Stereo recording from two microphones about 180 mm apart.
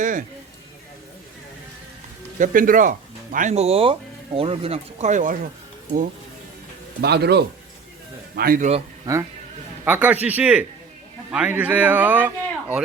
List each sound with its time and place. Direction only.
0.0 s a sound: 45° right (ahead or behind)
2.4 s speech: 50° right (ahead or behind)
7.0 s speech: 65° right (ahead or behind)
8.4 s speech: 50° right (ahead or behind)
9.1 s speech: 20° right (ahead or behind)
9.8 s a man's voice: 10° right (ahead or behind)